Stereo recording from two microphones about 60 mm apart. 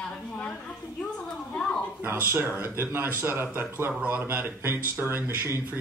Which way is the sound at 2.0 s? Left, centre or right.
Right.